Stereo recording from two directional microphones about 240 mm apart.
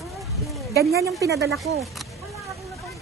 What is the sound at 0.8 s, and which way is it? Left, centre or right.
Speech, right.